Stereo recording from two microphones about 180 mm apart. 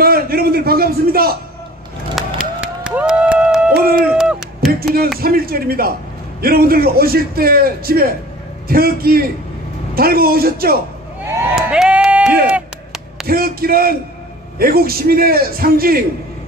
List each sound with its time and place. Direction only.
0.0 s a sound: 55° right (ahead or behind)
2.1 s music: 5° right (ahead or behind)
3.7 s music: 55° right (ahead or behind)
4.7 s a man's voice: 55° right (ahead or behind)
11.5 s a sound: 5° right (ahead or behind)
13.3 s a man's voice: 55° right (ahead or behind)